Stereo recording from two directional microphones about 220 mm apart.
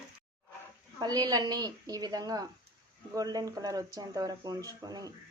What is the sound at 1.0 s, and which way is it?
A woman's voice, 15° right (ahead or behind).